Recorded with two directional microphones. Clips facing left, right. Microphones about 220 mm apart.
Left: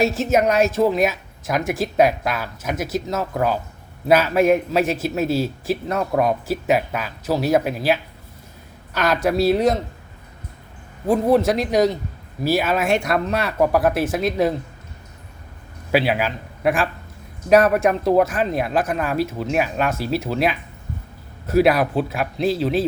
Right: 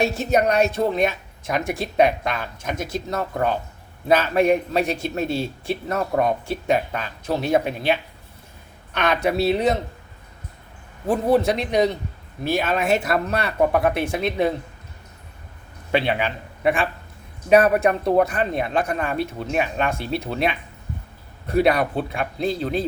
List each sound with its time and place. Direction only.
0.0 s a man's voice: centre (ahead or behind)
11.0 s a man's voice: centre (ahead or behind)
15.9 s a man's voice: 5° left (ahead or behind)